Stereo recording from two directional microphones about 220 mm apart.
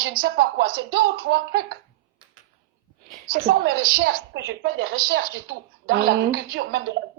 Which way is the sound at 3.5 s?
65° right (ahead or behind).